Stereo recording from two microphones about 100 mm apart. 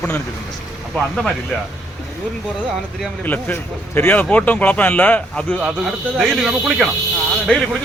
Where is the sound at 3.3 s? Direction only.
20° left (ahead or behind).